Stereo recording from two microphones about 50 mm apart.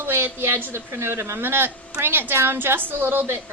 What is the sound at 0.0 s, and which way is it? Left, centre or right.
A child's voice, right.